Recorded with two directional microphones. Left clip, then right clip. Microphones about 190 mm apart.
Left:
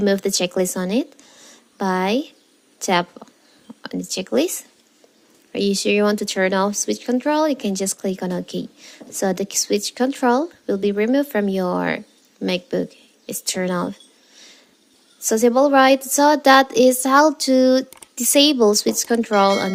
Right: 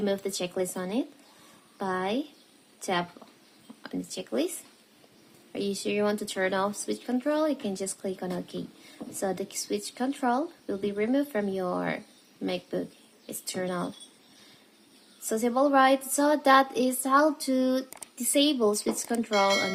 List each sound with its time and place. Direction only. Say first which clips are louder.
0.0 s speech: left 10 dB; 45° left (ahead or behind)
5.5 s speech: left 11 dB; 45° left (ahead or behind)
15.3 s speech: left 9 dB; 40° left (ahead or behind)